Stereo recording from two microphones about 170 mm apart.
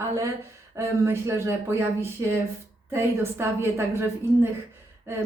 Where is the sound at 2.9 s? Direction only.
15° right (ahead or behind).